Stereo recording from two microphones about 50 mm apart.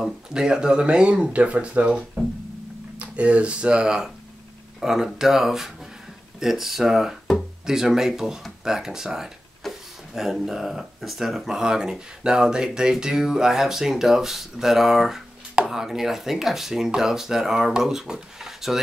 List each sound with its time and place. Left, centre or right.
0.0 s speech: centre